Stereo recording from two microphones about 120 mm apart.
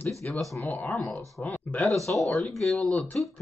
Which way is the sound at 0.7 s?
15° left (ahead or behind).